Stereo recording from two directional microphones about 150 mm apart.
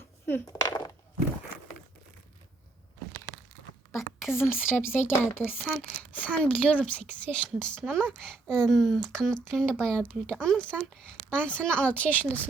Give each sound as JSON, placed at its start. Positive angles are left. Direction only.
{"t": 0.3, "sound": "speech", "side_deg": 15}
{"t": 4.3, "sound": "speech", "side_deg": 15}